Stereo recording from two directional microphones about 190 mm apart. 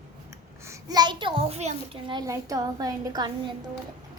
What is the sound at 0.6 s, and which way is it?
A child's voice, 20° right (ahead or behind).